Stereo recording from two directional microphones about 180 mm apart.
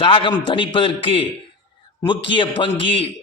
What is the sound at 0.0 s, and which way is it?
A man's voice, 30° left (ahead or behind).